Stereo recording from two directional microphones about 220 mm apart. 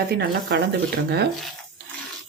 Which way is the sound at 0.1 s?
50° right (ahead or behind).